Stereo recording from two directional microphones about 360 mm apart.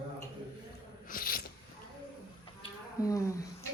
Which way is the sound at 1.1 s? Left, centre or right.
Left.